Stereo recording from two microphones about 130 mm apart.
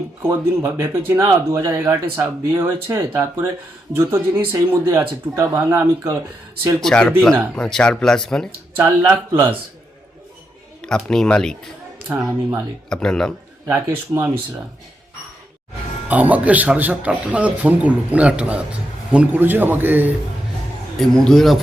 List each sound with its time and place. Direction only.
0.2 s speech: 25° right (ahead or behind)
6.7 s speech: 5° left (ahead or behind)
8.7 s speech: 20° right (ahead or behind)
10.8 s speech: 5° left (ahead or behind)
12.1 s speech: 15° right (ahead or behind)
12.9 s speech: 5° left (ahead or behind)
13.7 s speech: 25° right (ahead or behind)
16.0 s speech: 10° right (ahead or behind)
21.0 s speech: centre (ahead or behind)